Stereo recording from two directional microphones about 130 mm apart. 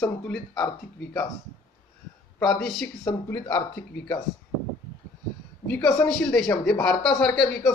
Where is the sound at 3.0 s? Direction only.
25° left (ahead or behind).